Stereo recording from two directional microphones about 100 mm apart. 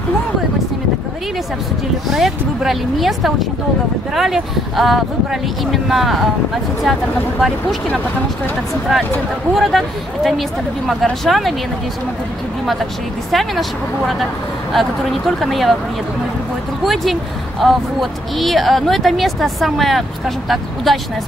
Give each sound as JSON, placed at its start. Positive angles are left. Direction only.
{"t": 2.0, "sound": "speech", "side_deg": 0}
{"t": 9.5, "sound": "speech", "side_deg": 0}
{"t": 13.3, "sound": "speech", "side_deg": 0}
{"t": 16.8, "sound": "speech", "side_deg": 0}